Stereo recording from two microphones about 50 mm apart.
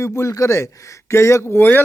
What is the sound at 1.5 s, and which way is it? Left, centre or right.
Speech, left.